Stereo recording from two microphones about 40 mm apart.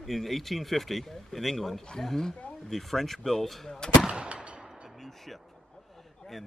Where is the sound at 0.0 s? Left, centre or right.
Centre.